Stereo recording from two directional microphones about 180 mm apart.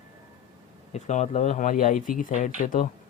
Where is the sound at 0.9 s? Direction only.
40° left (ahead or behind).